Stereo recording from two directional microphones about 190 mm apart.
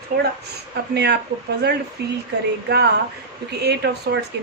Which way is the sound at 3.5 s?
60° right (ahead or behind).